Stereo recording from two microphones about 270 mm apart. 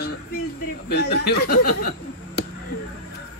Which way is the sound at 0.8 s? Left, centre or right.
Left.